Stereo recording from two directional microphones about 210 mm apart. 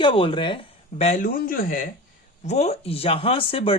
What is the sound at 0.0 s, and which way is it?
Speech, 25° left (ahead or behind).